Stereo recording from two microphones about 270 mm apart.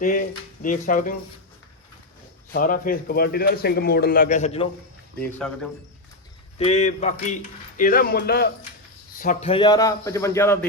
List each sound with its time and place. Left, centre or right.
0.0 s speech: left
2.5 s speech: left
5.4 s speech: centre
6.6 s a man's voice: left